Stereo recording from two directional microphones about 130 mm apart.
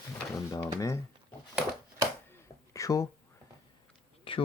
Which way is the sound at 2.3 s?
25° left (ahead or behind).